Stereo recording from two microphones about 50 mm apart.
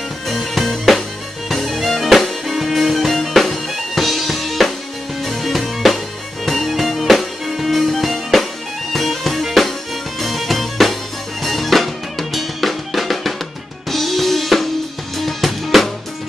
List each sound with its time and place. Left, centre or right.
0.3 s music: centre
13.8 s drum kit: centre
15.1 s music: centre